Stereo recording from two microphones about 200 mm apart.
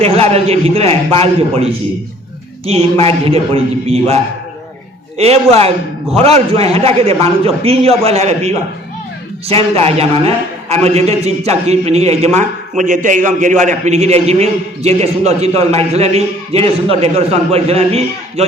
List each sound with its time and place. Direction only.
0.0 s a man's voice: 30° right (ahead or behind)
2.6 s a man's voice: 30° right (ahead or behind)